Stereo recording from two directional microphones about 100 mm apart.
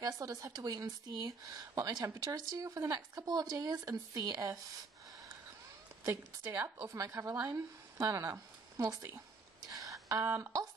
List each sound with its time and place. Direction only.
0.0 s a woman's voice: 35° right (ahead or behind)
6.0 s a woman's voice: 30° right (ahead or behind)
7.3 s speech: 20° right (ahead or behind)
8.0 s speech: 35° right (ahead or behind)
9.7 s a sound: 35° right (ahead or behind)